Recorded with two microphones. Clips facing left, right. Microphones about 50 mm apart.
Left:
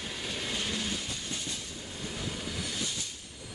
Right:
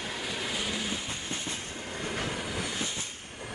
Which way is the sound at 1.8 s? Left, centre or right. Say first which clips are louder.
Right 6 dB; right.